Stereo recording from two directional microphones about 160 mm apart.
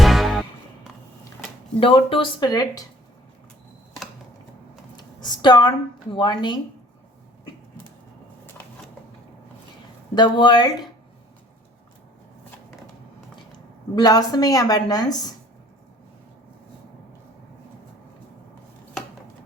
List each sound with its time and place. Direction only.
0.0 s music: centre (ahead or behind)
1.8 s speech: 35° left (ahead or behind)
4.9 s a sound: 25° left (ahead or behind)
6.1 s speech: 30° left (ahead or behind)
10.2 s speech: 30° left (ahead or behind)
13.9 s speech: 25° left (ahead or behind)